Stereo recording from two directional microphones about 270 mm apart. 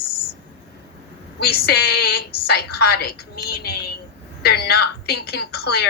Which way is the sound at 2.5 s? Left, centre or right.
Left.